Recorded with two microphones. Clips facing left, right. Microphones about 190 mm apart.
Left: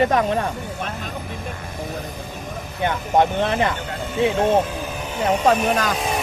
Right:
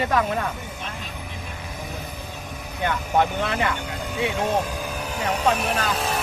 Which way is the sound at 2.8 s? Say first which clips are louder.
Left 3 dB; 20° left (ahead or behind).